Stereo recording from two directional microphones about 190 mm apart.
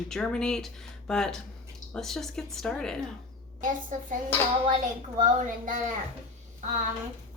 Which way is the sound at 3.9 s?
40° right (ahead or behind).